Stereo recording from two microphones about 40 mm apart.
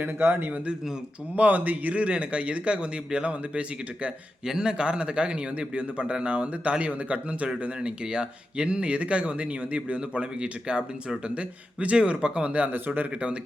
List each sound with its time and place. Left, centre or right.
0.0 s a man's voice: right
1.4 s a man's voice: right
4.4 s a man's voice: centre; by 13.1 s right
13.1 s speech: right